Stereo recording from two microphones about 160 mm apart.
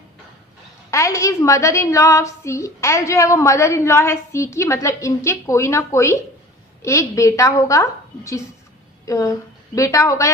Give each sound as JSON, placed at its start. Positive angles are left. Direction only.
{"t": 0.9, "sound": "a woman's voice", "side_deg": 20}